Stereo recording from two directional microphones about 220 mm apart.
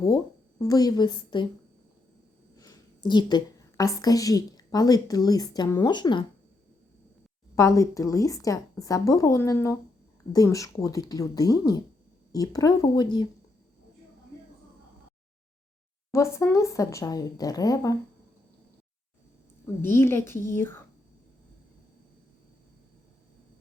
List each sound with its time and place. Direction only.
0.6 s a woman's voice: 15° left (ahead or behind)
2.6 s a woman's voice: 20° left (ahead or behind)
7.5 s a woman's voice: 15° left (ahead or behind)
16.1 s a woman's voice: 10° left (ahead or behind)
19.8 s a woman's voice: 10° left (ahead or behind)